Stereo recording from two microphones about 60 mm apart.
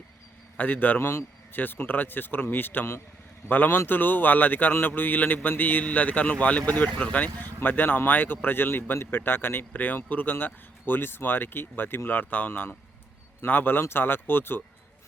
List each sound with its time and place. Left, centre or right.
0.5 s a man's voice: left